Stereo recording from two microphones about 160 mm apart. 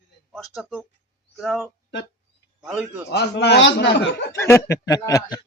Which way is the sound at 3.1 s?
90° left.